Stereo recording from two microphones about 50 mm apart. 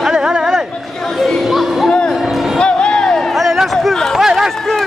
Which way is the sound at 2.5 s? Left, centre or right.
Centre.